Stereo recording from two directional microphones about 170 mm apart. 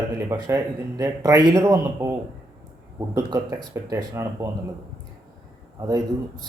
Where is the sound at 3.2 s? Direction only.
20° right (ahead or behind).